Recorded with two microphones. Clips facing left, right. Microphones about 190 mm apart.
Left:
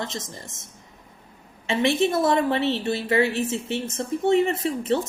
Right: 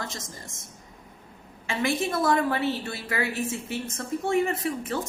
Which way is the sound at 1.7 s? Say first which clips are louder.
Left 5 dB; 25° left (ahead or behind).